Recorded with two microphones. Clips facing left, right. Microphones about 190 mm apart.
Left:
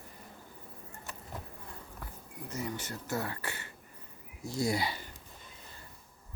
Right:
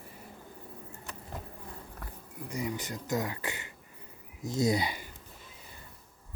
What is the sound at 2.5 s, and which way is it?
Speech, 15° right (ahead or behind).